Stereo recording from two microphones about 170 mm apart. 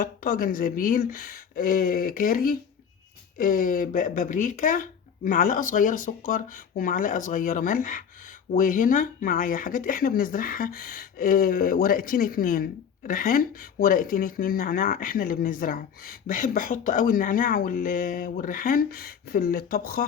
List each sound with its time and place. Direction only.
0.0 s speech: 55° left (ahead or behind)